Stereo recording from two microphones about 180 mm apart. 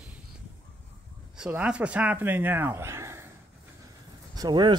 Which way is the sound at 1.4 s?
5° right (ahead or behind).